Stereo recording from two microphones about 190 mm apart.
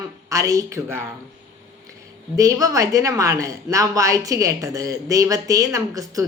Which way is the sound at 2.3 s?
15° right (ahead or behind).